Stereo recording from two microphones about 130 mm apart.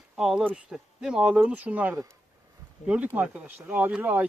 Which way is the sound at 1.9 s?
25° right (ahead or behind).